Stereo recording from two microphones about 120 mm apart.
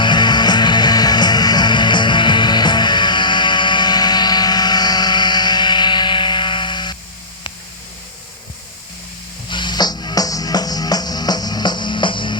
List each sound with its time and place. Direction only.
0.0 s music: 40° left (ahead or behind)
9.5 s music: 40° left (ahead or behind)